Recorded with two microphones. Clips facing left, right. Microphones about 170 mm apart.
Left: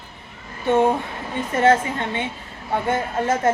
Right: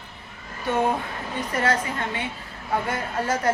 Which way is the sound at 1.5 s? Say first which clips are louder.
Left 7 dB; 25° left (ahead or behind).